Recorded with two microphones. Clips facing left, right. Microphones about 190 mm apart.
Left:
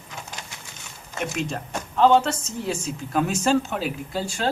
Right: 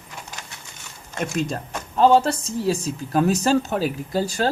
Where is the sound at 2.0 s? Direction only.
35° right (ahead or behind).